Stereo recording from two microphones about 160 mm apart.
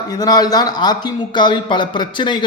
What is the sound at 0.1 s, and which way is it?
A man's voice, 25° left (ahead or behind).